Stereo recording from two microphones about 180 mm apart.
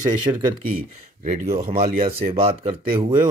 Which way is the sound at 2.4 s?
30° right (ahead or behind).